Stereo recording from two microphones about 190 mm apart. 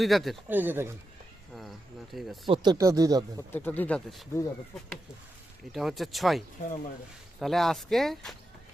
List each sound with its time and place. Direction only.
0.0 s speech: centre (ahead or behind)
0.5 s speech: 10° right (ahead or behind)
2.1 s speech: centre (ahead or behind)
2.5 s speech: 20° right (ahead or behind)
3.5 s speech: 10° left (ahead or behind)
5.7 s speech: centre (ahead or behind)